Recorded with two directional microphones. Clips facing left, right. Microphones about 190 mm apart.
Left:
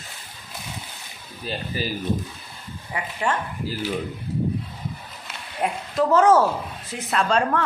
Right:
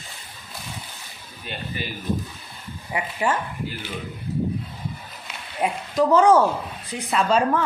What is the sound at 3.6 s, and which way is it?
Speech, 35° left (ahead or behind).